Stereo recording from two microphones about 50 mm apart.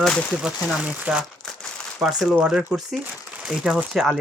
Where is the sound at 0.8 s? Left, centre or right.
Right.